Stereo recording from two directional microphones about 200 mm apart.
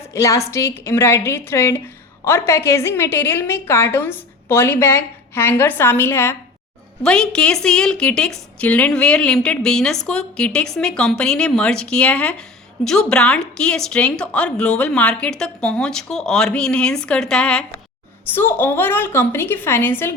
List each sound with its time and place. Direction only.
0.1 s a woman's voice: 15° left (ahead or behind)